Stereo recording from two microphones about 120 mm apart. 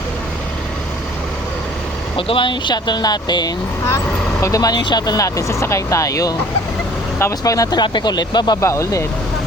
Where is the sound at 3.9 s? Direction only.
25° left (ahead or behind).